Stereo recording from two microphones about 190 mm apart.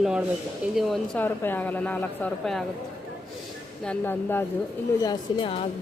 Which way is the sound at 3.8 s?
10° left (ahead or behind).